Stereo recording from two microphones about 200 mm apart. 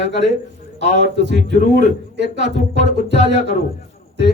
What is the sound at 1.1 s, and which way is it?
A man's voice, 60° right (ahead or behind).